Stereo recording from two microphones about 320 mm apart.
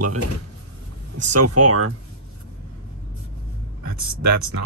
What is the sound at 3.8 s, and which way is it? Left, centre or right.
Speech, right.